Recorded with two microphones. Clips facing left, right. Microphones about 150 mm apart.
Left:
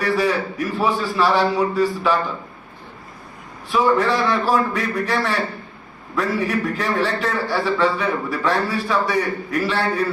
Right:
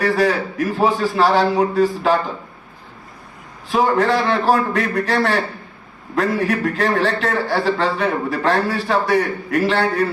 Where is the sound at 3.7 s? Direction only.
45° right (ahead or behind).